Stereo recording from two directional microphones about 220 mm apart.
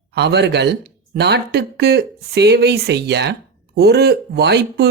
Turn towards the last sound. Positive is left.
turn(degrees=-50)  # may be behind; listen again after turning